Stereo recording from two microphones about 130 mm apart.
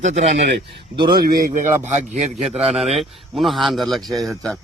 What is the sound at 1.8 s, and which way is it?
Speech, 65° right (ahead or behind).